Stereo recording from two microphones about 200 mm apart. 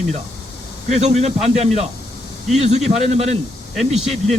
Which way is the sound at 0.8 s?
35° right (ahead or behind).